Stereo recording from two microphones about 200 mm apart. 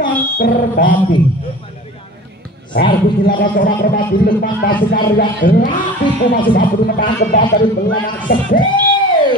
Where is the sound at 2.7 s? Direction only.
45° left (ahead or behind).